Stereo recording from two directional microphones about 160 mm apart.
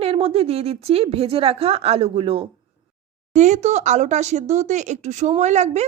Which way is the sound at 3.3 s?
50° right (ahead or behind).